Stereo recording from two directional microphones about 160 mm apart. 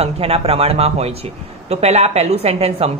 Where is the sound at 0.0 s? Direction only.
40° right (ahead or behind).